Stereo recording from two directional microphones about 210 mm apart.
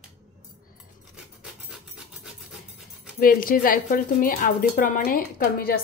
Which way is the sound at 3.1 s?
45° left (ahead or behind).